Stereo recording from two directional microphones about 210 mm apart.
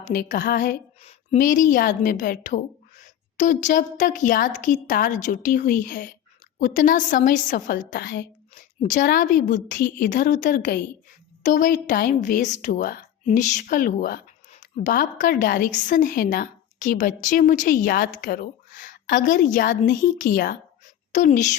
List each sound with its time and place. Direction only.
0.0 s a woman's voice: 40° left (ahead or behind)